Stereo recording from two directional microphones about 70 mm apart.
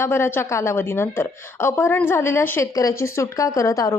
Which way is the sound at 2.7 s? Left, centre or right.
Left.